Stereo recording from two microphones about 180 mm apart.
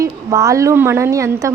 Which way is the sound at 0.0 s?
20° right (ahead or behind).